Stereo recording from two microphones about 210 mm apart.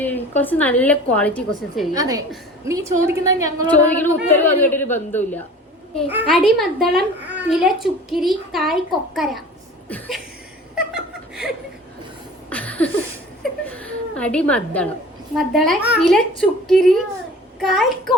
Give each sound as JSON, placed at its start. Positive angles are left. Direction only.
{"t": 0.0, "sound": "a woman's voice", "side_deg": 10}
{"t": 2.0, "sound": "a woman's voice", "side_deg": -15}
{"t": 3.7, "sound": "a woman's voice", "side_deg": 10}
{"t": 6.1, "sound": "a woman's voice", "side_deg": -5}
{"t": 10.9, "sound": "chuckle", "side_deg": -5}
{"t": 12.5, "sound": "a sound", "side_deg": 5}
{"t": 15.4, "sound": "a woman's voice", "side_deg": 0}